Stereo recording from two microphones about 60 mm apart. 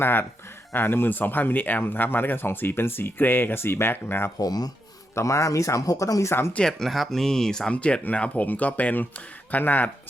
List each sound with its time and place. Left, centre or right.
0.0 s speech: left
4.4 s speech: left
5.1 s speech: left
6.7 s speech: centre; by 9.9 s left